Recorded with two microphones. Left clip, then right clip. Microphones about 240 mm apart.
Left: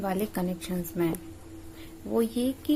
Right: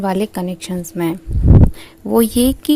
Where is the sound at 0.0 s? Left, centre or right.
Right.